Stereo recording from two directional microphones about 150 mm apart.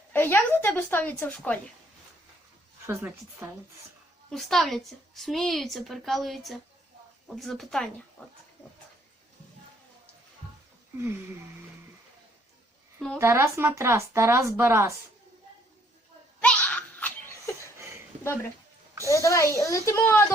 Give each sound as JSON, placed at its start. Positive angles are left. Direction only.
{"t": 0.1, "sound": "a woman's voice", "side_deg": 15}
{"t": 2.8, "sound": "speech", "side_deg": -15}
{"t": 4.3, "sound": "a woman's voice", "side_deg": 0}
{"t": 13.1, "sound": "speech", "side_deg": -20}
{"t": 16.4, "sound": "a sound", "side_deg": 10}
{"t": 17.7, "sound": "a sound", "side_deg": -20}
{"t": 19.0, "sound": "speech", "side_deg": 20}